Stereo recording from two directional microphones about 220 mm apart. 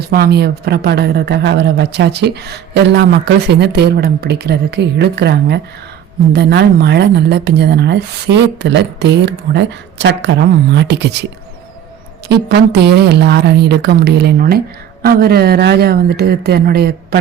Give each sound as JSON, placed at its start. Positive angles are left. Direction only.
{"t": 0.1, "sound": "a woman's voice", "side_deg": -45}
{"t": 12.5, "sound": "a woman's voice", "side_deg": -45}